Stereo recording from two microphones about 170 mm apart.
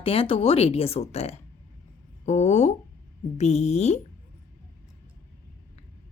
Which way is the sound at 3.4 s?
40° left (ahead or behind).